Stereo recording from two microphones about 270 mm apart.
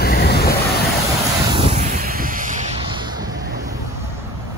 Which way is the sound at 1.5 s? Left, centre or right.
Right.